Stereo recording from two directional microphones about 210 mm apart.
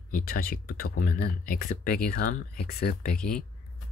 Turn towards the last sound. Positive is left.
turn(degrees=45)  # may be behind; listen again after turning